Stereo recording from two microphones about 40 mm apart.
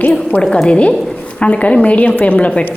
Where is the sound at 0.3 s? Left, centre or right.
Left.